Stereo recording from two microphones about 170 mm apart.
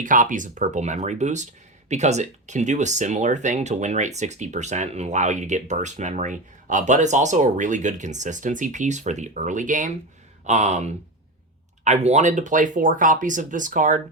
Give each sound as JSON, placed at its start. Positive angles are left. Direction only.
{"t": 0.0, "sound": "speech", "side_deg": -50}